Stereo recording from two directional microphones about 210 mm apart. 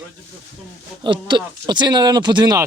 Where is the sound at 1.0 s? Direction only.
20° right (ahead or behind).